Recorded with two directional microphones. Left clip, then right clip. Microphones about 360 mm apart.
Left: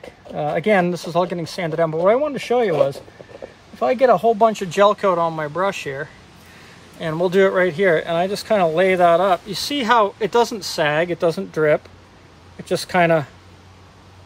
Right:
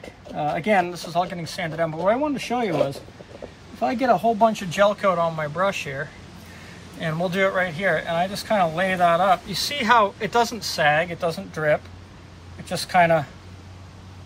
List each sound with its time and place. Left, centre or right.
0.5 s speech: left
4.0 s speech: centre